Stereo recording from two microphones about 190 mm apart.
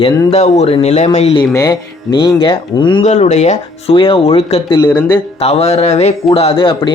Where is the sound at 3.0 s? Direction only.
35° left (ahead or behind); by 5.1 s 20° left (ahead or behind).